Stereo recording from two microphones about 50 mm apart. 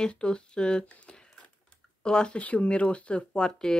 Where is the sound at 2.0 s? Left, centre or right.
Centre.